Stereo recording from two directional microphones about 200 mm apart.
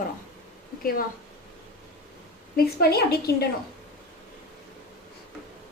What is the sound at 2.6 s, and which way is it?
Speech, 50° left (ahead or behind).